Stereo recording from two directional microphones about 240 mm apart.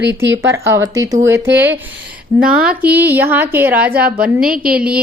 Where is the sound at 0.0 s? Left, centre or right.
Right.